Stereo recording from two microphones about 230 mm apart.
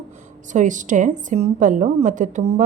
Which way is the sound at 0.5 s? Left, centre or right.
Right.